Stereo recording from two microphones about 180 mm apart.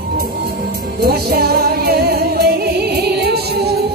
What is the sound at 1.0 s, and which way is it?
Music, 60° right (ahead or behind).